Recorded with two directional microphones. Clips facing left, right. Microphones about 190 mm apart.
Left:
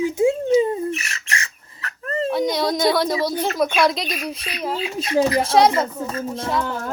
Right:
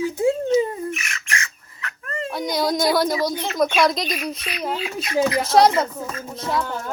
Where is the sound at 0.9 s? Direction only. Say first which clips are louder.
Left 2 dB; 35° left (ahead or behind).